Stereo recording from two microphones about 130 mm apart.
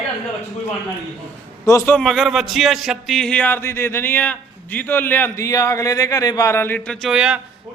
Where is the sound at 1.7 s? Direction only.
20° left (ahead or behind).